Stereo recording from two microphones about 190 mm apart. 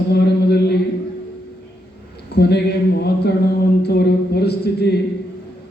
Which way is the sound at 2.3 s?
60° left (ahead or behind).